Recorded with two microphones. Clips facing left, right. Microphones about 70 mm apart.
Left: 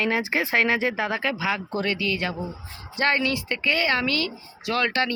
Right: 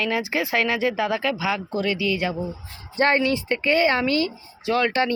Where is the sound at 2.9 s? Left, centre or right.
Right.